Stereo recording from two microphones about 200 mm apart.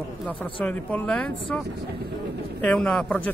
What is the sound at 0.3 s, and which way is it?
Speech, 5° left (ahead or behind).